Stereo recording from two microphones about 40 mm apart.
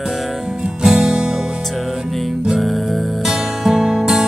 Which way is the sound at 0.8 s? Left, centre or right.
Centre.